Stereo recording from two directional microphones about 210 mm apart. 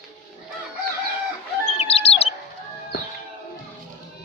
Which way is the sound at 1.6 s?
30° left (ahead or behind).